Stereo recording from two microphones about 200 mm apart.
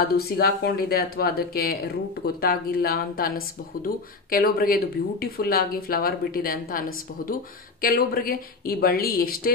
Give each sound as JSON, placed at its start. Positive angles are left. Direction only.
{"t": 0.4, "sound": "speech", "side_deg": 50}